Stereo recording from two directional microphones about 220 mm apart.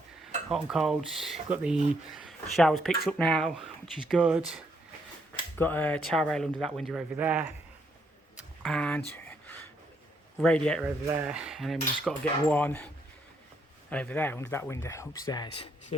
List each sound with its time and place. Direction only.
0.5 s speech: centre (ahead or behind)
5.5 s speech: 10° left (ahead or behind)
8.6 s speech: 5° left (ahead or behind)
9.1 s a sound: 10° left (ahead or behind)
10.4 s speech: 5° left (ahead or behind)
13.9 s speech: 5° left (ahead or behind)
15.5 s speech: 25° left (ahead or behind)